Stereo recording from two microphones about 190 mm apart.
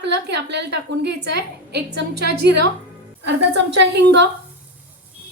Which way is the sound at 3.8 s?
65° right (ahead or behind).